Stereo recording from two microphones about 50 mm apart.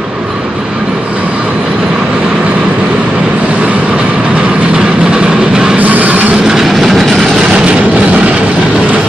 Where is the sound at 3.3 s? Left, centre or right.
Right.